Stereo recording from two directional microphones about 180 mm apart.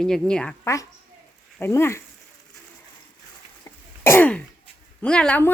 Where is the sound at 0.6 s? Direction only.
15° left (ahead or behind).